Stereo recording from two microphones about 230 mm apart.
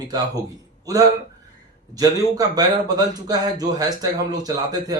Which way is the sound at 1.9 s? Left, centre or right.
Centre.